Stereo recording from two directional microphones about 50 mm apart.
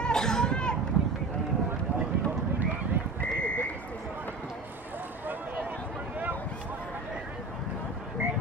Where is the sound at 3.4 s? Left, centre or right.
Left.